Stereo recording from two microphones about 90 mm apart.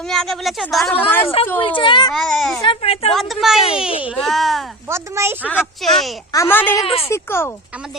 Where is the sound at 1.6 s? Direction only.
70° left (ahead or behind).